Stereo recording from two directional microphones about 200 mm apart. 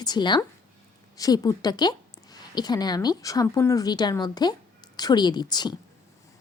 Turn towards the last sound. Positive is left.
turn(degrees=20)  # may be behind; listen again after turning